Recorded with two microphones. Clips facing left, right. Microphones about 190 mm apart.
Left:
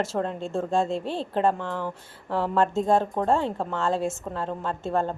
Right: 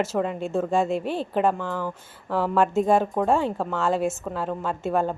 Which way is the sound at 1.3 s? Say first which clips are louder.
Even; 5° right (ahead or behind).